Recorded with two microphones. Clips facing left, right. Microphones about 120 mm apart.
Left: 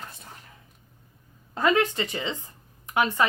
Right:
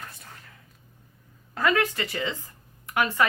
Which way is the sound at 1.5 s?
25° left (ahead or behind).